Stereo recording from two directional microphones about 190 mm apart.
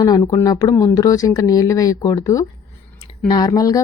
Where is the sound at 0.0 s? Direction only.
20° left (ahead or behind).